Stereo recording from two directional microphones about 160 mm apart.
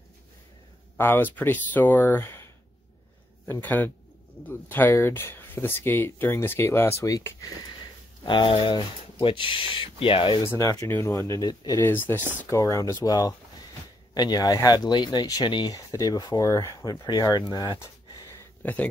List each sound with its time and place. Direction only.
0.9 s speech: 15° left (ahead or behind); by 10.5 s 35° left (ahead or behind)
10.6 s speech: 20° left (ahead or behind)
18.6 s speech: 10° left (ahead or behind)